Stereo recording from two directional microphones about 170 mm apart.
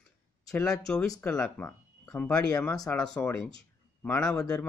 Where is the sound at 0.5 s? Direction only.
5° left (ahead or behind).